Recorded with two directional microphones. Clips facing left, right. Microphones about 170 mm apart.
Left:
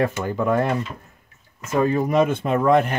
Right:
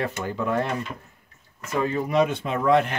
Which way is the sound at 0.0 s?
45° left (ahead or behind).